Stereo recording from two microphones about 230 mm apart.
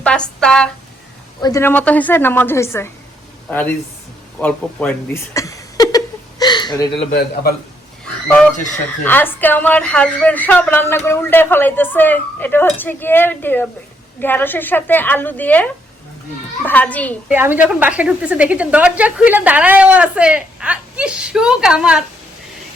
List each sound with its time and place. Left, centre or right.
0.0 s a woman's voice: centre
1.4 s speech: centre
6.4 s a sound: centre
6.9 s a man's voice: left
8.7 s speech: centre
17.2 s a woman's voice: centre